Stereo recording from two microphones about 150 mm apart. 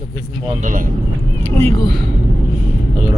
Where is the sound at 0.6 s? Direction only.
60° right (ahead or behind).